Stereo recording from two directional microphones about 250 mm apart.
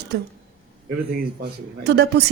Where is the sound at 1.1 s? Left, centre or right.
Right.